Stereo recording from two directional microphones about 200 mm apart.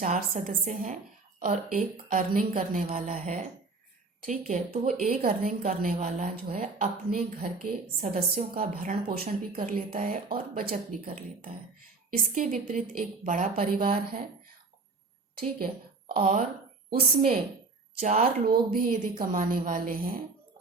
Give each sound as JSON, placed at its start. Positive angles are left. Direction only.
{"t": 0.0, "sound": "a woman's voice", "side_deg": -40}
{"t": 16.0, "sound": "a woman's voice", "side_deg": -45}
{"t": 18.4, "sound": "a woman's voice", "side_deg": -45}